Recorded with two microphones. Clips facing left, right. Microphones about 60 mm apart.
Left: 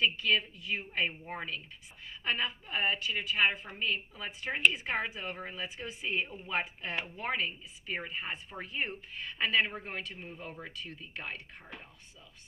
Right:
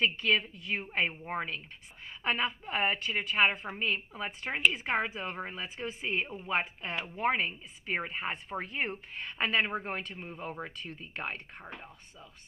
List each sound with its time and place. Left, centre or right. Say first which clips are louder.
0.0 s a woman's voice: right 1 dB; right